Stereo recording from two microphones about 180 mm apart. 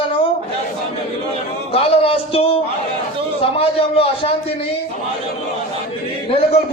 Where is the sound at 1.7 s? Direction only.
35° left (ahead or behind).